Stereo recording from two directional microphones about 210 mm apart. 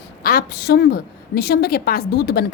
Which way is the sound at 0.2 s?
45° left (ahead or behind).